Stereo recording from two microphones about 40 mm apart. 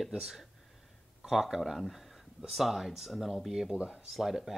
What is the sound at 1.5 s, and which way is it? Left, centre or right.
Speech, centre.